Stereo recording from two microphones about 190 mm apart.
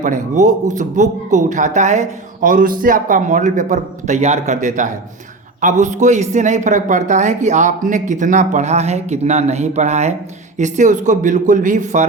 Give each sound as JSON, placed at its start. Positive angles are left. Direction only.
{"t": 0.0, "sound": "speech", "side_deg": -40}